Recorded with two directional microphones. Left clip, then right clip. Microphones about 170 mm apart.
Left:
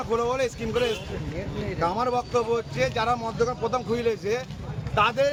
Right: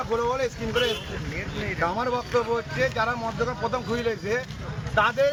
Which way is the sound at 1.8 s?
25° left (ahead or behind).